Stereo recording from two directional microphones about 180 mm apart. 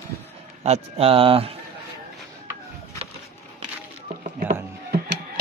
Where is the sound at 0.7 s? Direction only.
35° right (ahead or behind).